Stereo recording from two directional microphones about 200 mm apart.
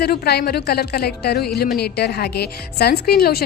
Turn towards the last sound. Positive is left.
turn(degrees=50)  # may be behind; listen again after turning